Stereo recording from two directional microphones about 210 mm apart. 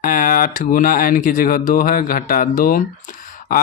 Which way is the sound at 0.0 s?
40° left (ahead or behind).